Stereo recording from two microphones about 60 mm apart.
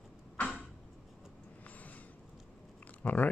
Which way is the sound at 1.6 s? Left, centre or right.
Left.